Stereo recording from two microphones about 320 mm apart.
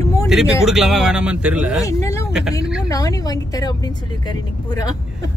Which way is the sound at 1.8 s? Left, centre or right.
Centre.